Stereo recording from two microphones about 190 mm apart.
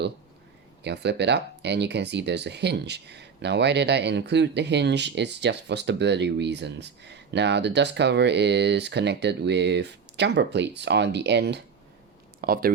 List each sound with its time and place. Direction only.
0.8 s speech: 60° right (ahead or behind)
12.4 s speech: 50° right (ahead or behind)